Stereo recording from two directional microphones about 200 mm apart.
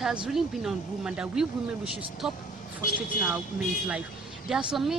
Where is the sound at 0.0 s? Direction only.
5° right (ahead or behind).